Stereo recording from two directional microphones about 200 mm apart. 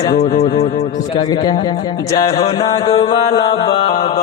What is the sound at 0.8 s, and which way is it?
A man's voice, 20° left (ahead or behind).